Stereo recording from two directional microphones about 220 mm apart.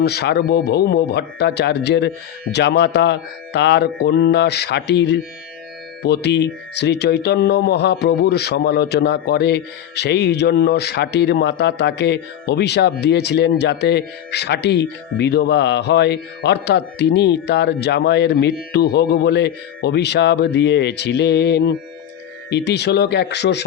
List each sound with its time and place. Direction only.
0.0 s speech: 45° left (ahead or behind)